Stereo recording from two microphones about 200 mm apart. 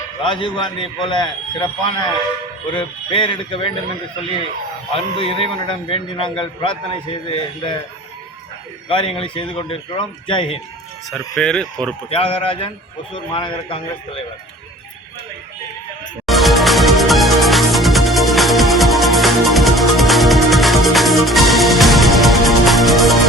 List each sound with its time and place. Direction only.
0.2 s a man's voice: 25° left (ahead or behind)
4.9 s a man's voice: 25° left (ahead or behind)
8.9 s a man's voice: 25° left (ahead or behind)
11.1 s speech: 5° left (ahead or behind)
12.1 s a man's voice: 25° left (ahead or behind)
16.2 s music: centre (ahead or behind)